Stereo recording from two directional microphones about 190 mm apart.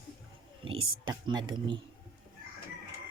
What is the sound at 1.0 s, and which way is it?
Speech, 20° right (ahead or behind).